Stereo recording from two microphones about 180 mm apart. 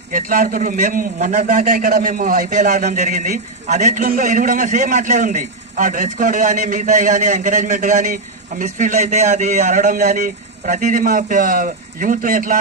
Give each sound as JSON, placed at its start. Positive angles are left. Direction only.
{"t": 0.1, "sound": "a man's voice", "side_deg": -50}